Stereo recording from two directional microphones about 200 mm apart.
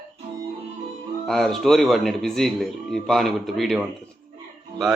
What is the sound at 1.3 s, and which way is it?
A man's voice, centre (ahead or behind).